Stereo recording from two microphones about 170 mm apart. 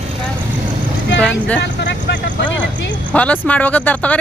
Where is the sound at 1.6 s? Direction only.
90° left.